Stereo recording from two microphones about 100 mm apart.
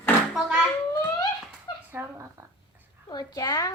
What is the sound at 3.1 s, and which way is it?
Speech, 45° left (ahead or behind).